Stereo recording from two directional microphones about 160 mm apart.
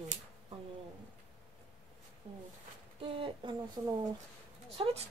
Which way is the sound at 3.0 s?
35° right (ahead or behind).